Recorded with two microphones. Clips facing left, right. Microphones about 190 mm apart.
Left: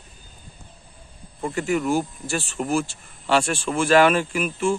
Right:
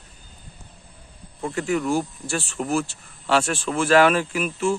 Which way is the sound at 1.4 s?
Centre (ahead or behind).